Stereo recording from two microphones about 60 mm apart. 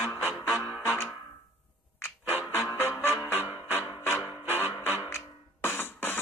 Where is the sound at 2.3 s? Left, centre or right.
Left.